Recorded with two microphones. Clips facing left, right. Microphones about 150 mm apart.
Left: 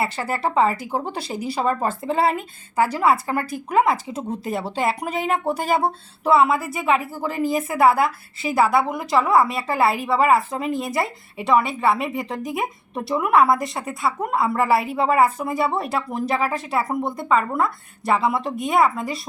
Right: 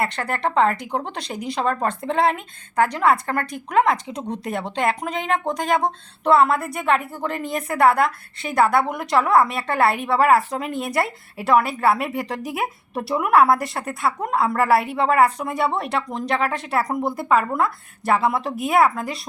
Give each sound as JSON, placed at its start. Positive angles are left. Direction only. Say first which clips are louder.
{"t": 0.0, "sound": "a woman's voice", "louder": "even", "side_deg": 5}